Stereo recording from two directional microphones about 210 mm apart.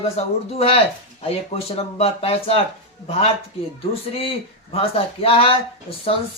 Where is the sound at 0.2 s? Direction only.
30° left (ahead or behind).